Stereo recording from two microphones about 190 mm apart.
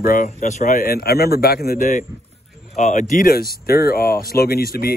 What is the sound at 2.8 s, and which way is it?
Speech, 40° left (ahead or behind).